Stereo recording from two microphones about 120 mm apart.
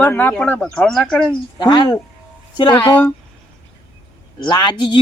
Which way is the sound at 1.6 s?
35° left (ahead or behind).